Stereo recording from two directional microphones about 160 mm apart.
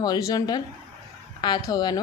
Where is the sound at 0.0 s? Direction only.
25° left (ahead or behind).